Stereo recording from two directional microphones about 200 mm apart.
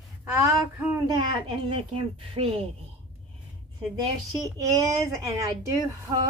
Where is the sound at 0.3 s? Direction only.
10° right (ahead or behind).